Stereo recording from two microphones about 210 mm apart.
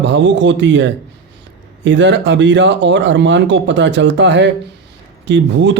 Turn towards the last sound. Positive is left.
turn(degrees=-60)  # may be behind; listen again after turning